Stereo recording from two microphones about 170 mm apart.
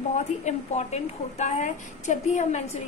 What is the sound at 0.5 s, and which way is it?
A woman's voice, 45° left (ahead or behind).